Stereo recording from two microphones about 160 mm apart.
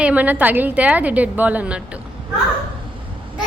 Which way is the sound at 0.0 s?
10° right (ahead or behind).